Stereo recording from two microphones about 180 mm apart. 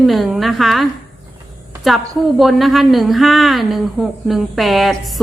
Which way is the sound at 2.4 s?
Centre (ahead or behind).